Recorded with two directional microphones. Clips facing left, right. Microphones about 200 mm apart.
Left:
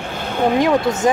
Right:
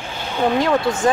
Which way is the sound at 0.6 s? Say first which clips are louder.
Left 2 dB; 20° left (ahead or behind).